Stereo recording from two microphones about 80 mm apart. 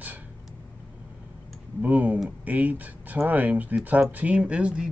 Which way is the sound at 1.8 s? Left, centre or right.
Right.